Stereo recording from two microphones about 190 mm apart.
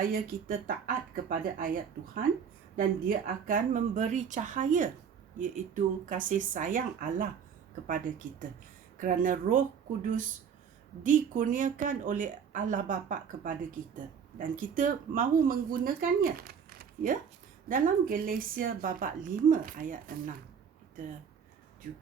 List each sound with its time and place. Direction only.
1.1 s speech: 50° right (ahead or behind)